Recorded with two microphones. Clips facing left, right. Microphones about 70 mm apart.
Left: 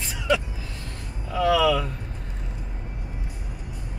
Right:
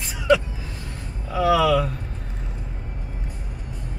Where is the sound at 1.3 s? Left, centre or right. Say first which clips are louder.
Right 2 dB; centre.